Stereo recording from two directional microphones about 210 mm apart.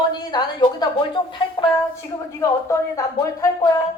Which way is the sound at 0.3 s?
20° left (ahead or behind).